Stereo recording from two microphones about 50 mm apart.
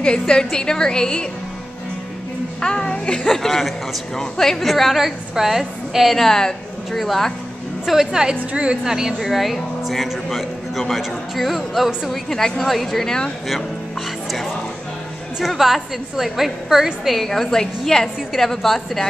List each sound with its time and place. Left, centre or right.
0.0 s a woman's voice: centre
2.6 s a woman's voice: centre
3.3 s a woman's voice: centre
15.4 s a woman's voice: centre